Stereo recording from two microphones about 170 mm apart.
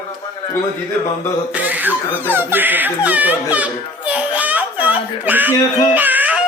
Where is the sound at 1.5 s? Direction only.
10° right (ahead or behind).